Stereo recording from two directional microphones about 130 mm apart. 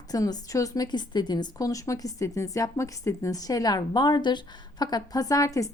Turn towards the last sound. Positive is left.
turn(degrees=25)  # may be behind; listen again after turning